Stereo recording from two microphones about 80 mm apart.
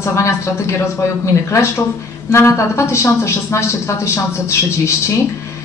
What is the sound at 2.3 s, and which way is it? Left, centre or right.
Speech, left.